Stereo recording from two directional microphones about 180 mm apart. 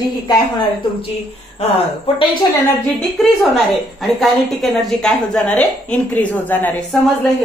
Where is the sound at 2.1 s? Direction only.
30° left (ahead or behind).